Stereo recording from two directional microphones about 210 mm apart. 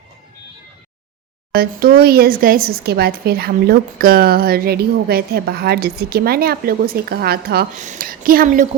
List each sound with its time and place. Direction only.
1.5 s speech: 45° right (ahead or behind)